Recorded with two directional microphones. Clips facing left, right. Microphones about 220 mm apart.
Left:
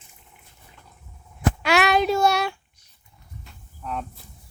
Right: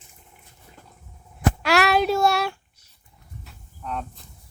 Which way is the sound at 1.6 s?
Centre (ahead or behind).